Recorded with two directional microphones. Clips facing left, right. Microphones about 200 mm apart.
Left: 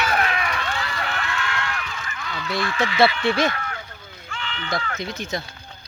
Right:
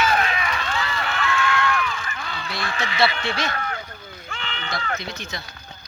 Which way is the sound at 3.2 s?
50° left (ahead or behind).